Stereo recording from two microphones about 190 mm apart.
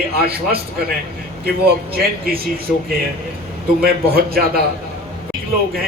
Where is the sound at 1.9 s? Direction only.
50° right (ahead or behind).